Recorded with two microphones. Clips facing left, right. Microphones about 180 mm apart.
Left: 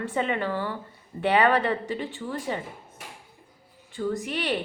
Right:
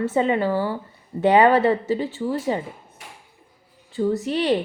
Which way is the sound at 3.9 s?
35° right (ahead or behind).